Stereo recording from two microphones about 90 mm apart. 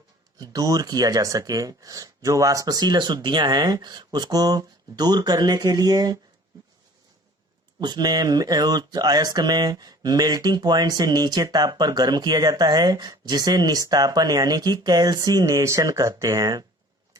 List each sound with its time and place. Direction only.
0.3 s speech: 45° right (ahead or behind)
7.8 s speech: 50° right (ahead or behind)